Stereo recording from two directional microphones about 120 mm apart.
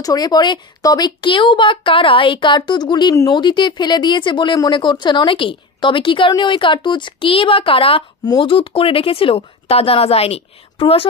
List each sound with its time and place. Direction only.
0.0 s a woman's voice: 30° left (ahead or behind); by 11.1 s 50° left (ahead or behind)